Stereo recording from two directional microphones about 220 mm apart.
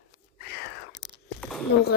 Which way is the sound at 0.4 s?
45° left (ahead or behind).